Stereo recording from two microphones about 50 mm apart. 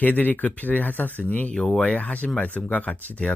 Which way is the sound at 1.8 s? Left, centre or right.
Left.